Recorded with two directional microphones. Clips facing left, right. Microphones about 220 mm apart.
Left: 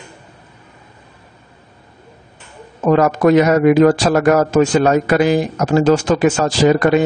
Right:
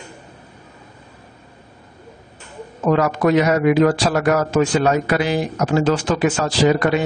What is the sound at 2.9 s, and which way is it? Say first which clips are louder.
Speech: left 4 dB; 45° left (ahead or behind).